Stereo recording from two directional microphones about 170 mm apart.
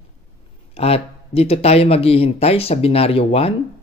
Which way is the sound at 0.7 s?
35° left (ahead or behind).